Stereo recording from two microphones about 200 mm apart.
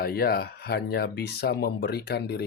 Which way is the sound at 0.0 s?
50° left (ahead or behind).